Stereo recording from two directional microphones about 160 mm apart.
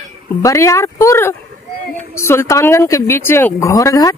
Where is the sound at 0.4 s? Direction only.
20° left (ahead or behind).